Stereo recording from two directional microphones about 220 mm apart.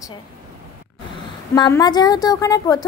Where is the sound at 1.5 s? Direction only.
20° left (ahead or behind).